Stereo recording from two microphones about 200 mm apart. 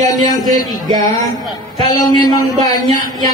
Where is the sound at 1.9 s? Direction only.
20° left (ahead or behind).